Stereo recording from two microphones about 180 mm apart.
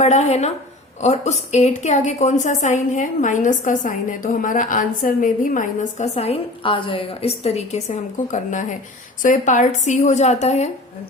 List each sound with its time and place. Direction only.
0.0 s a woman's voice: 40° left (ahead or behind)